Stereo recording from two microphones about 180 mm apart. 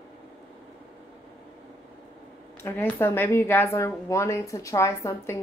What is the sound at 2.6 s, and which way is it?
A woman's voice, 15° left (ahead or behind).